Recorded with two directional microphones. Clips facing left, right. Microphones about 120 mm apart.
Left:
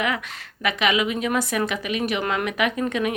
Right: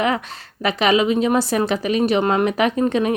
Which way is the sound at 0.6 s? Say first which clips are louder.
Right 5 dB; 35° right (ahead or behind).